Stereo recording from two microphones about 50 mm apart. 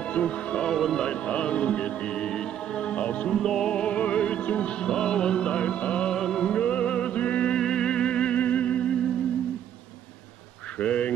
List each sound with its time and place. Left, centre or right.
0.0 s music: left
0.7 s speech: centre
1.0 s music: left
3.3 s speech: centre
3.7 s music: left
6.1 s speech: centre
6.4 s music: left
10.8 s duck: left